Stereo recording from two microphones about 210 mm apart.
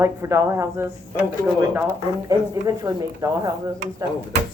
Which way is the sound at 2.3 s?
15° right (ahead or behind).